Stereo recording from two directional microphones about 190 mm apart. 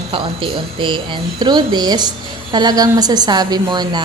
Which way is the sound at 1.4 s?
20° right (ahead or behind).